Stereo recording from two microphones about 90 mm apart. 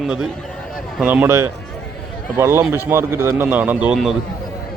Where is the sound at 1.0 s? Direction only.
20° right (ahead or behind).